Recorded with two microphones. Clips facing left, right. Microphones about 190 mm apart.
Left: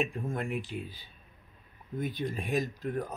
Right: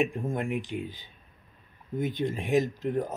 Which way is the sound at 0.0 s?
20° right (ahead or behind).